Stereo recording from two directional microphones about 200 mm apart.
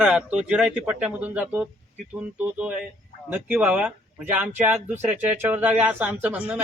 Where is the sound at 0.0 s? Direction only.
5° right (ahead or behind).